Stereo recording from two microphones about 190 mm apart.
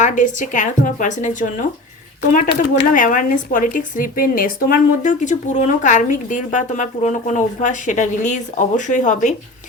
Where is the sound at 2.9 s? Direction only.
45° left (ahead or behind).